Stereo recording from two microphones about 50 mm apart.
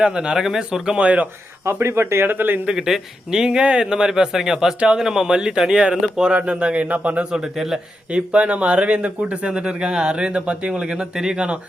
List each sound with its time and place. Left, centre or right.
0.0 s a man's voice: centre
1.0 s speech: right
1.6 s speech: right
2.7 s a man's voice: centre
6.3 s speech: right
7.3 s a man's voice: centre
8.1 s speech: right